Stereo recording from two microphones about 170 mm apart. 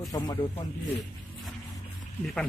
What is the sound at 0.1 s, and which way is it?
Speech, 20° left (ahead or behind).